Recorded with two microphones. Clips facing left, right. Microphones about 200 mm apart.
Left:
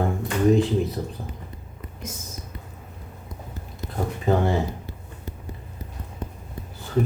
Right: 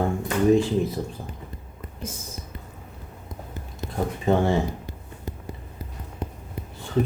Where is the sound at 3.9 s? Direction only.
Centre (ahead or behind).